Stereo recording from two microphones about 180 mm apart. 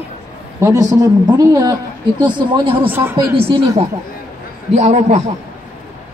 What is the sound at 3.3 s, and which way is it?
Speech, 30° right (ahead or behind).